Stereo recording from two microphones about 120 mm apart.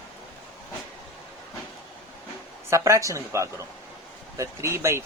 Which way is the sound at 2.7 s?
25° right (ahead or behind).